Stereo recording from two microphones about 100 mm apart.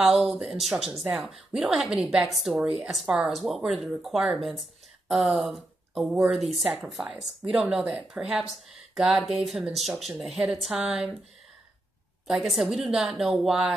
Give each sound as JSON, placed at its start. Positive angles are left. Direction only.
{"t": 0.0, "sound": "speech", "side_deg": 0}
{"t": 12.3, "sound": "speech", "side_deg": 0}